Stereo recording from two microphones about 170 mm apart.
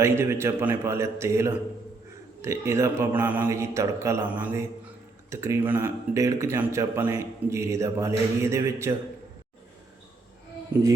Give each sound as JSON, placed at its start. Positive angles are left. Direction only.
{"t": 0.0, "sound": "speech", "side_deg": -15}